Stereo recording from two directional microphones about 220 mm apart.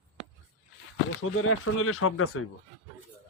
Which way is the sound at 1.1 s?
70° left (ahead or behind).